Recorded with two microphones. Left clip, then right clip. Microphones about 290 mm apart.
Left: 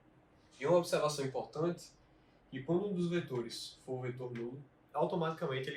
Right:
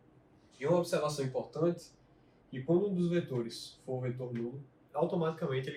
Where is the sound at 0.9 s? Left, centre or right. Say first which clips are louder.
Right 1 dB; centre.